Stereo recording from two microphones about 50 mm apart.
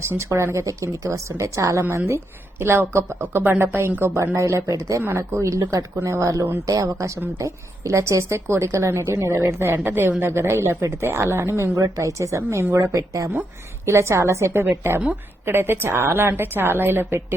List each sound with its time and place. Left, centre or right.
0.0 s a woman's voice: right
0.5 s a woman's voice: right
2.0 s a woman's voice: right
4.4 s speech: right
5.0 s a woman's voice: right
5.4 s a woman's voice: right
9.7 s a woman's voice: right
13.8 s a woman's voice: right
15.4 s a woman's voice: right